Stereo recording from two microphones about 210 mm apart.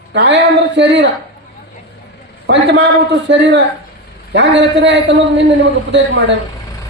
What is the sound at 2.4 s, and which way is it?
Speech, 55° right (ahead or behind).